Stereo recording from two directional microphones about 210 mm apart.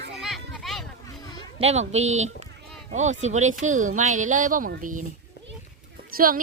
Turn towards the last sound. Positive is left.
turn(degrees=-45)  # may be behind; listen again after turning